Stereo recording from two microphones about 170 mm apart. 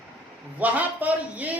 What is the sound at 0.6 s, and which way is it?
Speech, 10° right (ahead or behind).